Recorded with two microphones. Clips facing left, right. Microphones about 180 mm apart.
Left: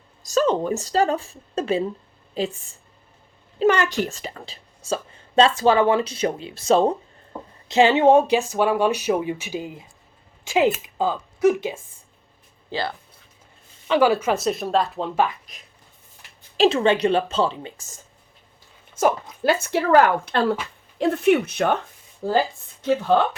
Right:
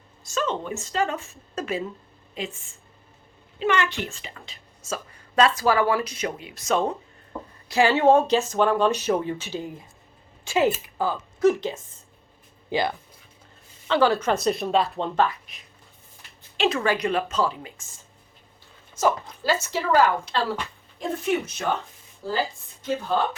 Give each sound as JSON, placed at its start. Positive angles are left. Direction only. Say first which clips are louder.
{"t": 0.2, "sound": "a woman's voice", "louder": "left 7 dB", "side_deg": 40}
{"t": 7.7, "sound": "speech", "louder": "left 3 dB", "side_deg": 20}
{"t": 12.7, "sound": "speech", "louder": "right 3 dB", "side_deg": -15}
{"t": 13.8, "sound": "a woman's voice", "louder": "left 2 dB", "side_deg": 15}
{"t": 15.5, "sound": "a woman's voice", "louder": "left 2 dB", "side_deg": 40}
{"t": 16.6, "sound": "a woman's voice", "louder": "left 6 dB", "side_deg": 25}
{"t": 18.9, "sound": "speech", "louder": "left 3 dB", "side_deg": 55}